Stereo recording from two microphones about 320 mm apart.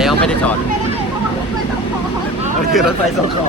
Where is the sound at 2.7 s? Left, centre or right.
Centre.